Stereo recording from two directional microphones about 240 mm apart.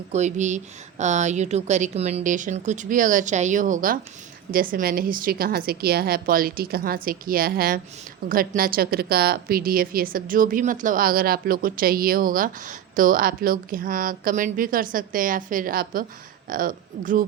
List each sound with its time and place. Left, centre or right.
0.1 s a woman's voice: right